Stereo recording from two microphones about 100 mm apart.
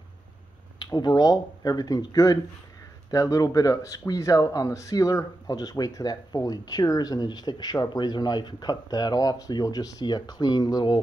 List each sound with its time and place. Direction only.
0.9 s speech: 45° left (ahead or behind)